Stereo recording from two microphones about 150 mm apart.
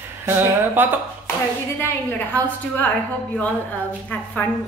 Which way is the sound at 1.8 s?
10° left (ahead or behind).